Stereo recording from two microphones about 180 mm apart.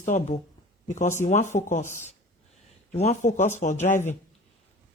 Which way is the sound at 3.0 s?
40° left (ahead or behind).